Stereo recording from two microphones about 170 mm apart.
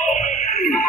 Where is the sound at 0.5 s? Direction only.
60° left (ahead or behind).